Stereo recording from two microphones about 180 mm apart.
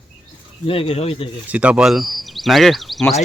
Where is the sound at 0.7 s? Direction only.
30° left (ahead or behind).